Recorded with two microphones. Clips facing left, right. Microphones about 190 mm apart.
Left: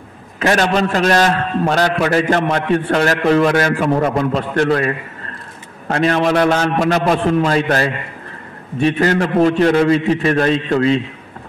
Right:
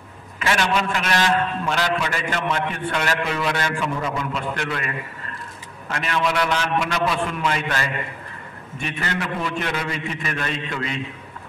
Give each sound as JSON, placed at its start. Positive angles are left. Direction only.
{"t": 0.4, "sound": "a man's voice", "side_deg": 40}
{"t": 4.3, "sound": "a man's voice", "side_deg": 35}